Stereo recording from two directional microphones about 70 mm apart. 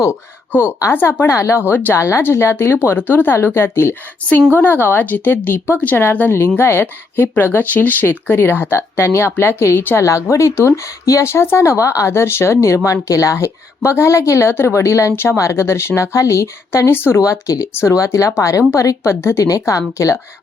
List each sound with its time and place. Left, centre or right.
0.9 s speech: left
2.0 s speech: left
10.0 s speech: left
16.9 s speech: left
17.4 s speech: left
17.7 s speech: left